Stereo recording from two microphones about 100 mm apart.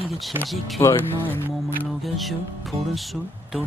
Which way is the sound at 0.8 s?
30° left (ahead or behind).